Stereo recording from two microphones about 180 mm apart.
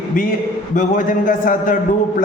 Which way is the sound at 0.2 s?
50° left (ahead or behind).